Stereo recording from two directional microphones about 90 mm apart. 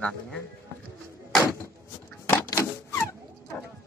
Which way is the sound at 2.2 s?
30° left (ahead or behind).